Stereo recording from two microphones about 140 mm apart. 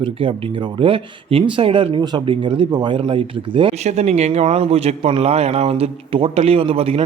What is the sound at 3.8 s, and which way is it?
Speech, 50° right (ahead or behind).